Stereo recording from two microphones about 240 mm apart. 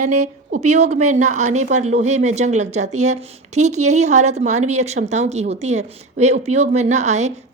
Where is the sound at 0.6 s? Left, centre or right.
Right.